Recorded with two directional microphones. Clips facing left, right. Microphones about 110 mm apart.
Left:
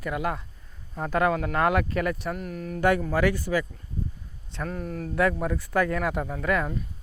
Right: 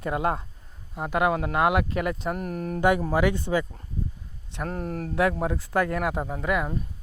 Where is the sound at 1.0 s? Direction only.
15° right (ahead or behind).